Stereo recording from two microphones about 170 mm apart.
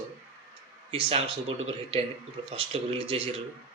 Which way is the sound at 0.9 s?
35° right (ahead or behind).